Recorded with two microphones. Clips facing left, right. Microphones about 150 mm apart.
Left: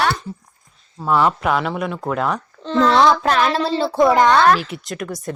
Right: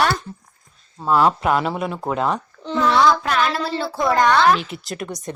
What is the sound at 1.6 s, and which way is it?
A man's voice, 30° right (ahead or behind).